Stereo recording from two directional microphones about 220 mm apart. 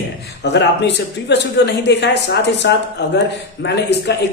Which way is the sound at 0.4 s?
50° left (ahead or behind).